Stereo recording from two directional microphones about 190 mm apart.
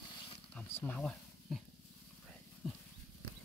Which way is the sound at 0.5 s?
5° left (ahead or behind).